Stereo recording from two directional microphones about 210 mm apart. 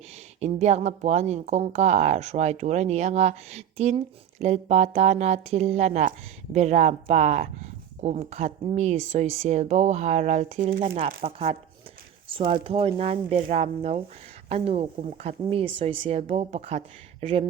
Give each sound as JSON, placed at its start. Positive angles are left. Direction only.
{"t": 0.3, "sound": "speech", "side_deg": -30}
{"t": 10.9, "sound": "speech", "side_deg": -25}